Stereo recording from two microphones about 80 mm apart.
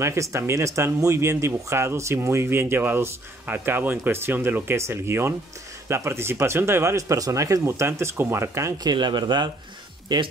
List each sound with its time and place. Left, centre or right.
0.0 s speech: right
8.8 s speech: right